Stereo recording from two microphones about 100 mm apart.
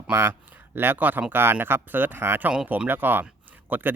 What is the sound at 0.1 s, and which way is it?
A man's voice, 20° right (ahead or behind).